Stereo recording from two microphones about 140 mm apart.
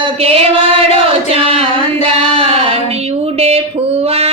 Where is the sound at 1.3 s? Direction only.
45° right (ahead or behind).